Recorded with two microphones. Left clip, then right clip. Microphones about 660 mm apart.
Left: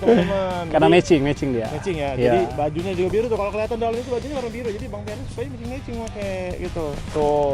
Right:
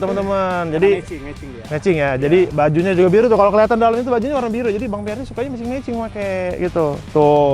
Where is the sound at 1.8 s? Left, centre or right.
Right.